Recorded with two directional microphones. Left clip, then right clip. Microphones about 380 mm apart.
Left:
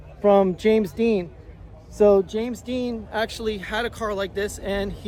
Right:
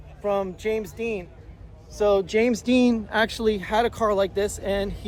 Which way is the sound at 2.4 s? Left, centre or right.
Right.